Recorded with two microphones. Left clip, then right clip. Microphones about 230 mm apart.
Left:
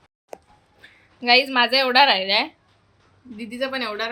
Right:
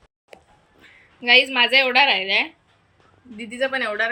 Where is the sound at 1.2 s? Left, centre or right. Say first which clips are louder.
Right 1 dB; centre.